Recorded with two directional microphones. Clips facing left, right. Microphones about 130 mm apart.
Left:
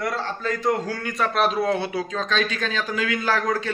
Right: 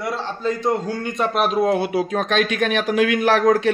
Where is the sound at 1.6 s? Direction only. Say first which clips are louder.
Right 5 dB; 50° right (ahead or behind).